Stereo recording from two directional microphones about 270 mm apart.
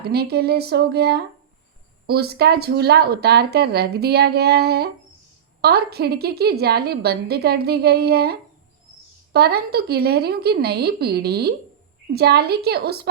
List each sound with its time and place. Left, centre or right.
0.0 s speech: right